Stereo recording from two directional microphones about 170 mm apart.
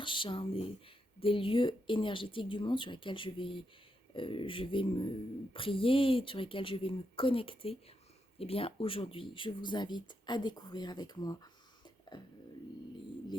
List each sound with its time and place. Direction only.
0.0 s a woman's voice: 30° left (ahead or behind)